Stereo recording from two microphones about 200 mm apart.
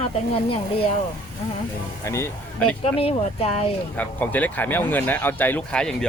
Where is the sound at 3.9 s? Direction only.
10° left (ahead or behind).